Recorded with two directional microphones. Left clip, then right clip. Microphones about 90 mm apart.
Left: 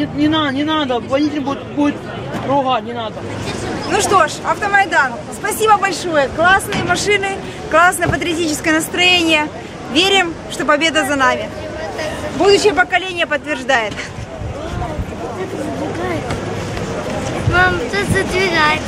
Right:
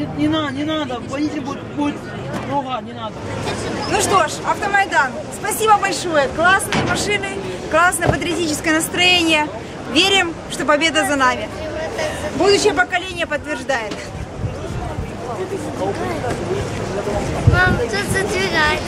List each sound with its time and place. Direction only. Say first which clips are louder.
0.2 s speech: left 4 dB; 35° left (ahead or behind)
3.9 s speech: left 3 dB; 5° left (ahead or behind)
17.6 s speech: left 3 dB; 5° right (ahead or behind)